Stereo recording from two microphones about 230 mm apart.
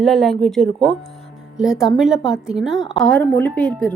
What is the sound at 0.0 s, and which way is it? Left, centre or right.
A woman's voice, centre.